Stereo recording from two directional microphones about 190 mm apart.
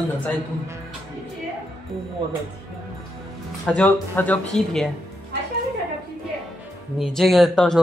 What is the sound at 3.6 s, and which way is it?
Speech, 5° left (ahead or behind).